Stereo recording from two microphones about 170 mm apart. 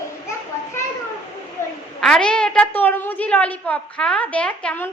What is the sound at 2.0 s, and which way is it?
A woman's voice, 5° left (ahead or behind).